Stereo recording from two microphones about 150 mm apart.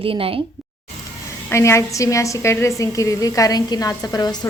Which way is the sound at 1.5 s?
20° left (ahead or behind).